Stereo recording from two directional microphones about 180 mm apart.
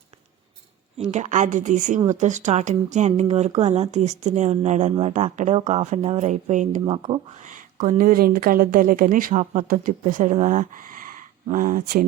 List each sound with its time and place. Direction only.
1.1 s speech: 40° right (ahead or behind)
6.8 s speech: 30° right (ahead or behind)
7.4 s speech: 45° right (ahead or behind)